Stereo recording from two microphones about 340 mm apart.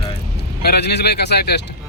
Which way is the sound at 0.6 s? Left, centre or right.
Left.